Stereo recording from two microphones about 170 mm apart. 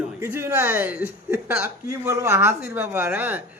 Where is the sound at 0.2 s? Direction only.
15° right (ahead or behind).